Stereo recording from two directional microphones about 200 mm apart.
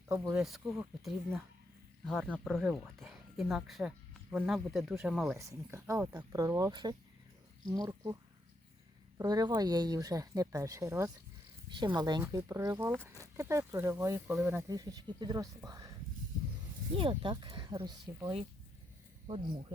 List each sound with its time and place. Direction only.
0.1 s speech: 10° right (ahead or behind)
0.4 s speech: centre (ahead or behind)
5.4 s speech: 15° right (ahead or behind)
17.0 s speech: 25° right (ahead or behind)